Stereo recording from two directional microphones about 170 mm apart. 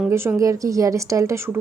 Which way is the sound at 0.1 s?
15° right (ahead or behind).